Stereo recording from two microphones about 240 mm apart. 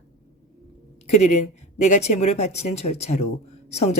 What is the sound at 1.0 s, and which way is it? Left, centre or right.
Speech, left.